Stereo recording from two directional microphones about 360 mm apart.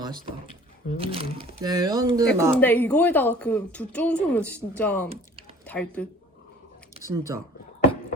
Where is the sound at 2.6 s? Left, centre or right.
Centre.